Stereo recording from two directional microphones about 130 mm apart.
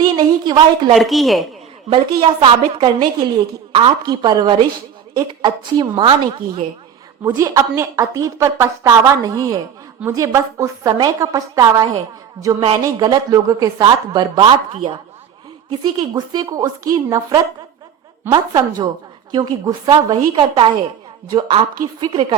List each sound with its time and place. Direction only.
0.2 s a woman's voice: 35° right (ahead or behind)
0.9 s a woman's voice: centre (ahead or behind)
1.9 s a woman's voice: 40° right (ahead or behind)
4.0 s a woman's voice: 35° right (ahead or behind)
7.3 s a woman's voice: 25° right (ahead or behind)
14.7 s a woman's voice: 45° right (ahead or behind)
15.8 s a woman's voice: 35° right (ahead or behind)